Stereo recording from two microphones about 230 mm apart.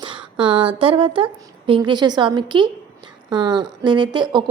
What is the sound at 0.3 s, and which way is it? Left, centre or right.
A woman's voice, right.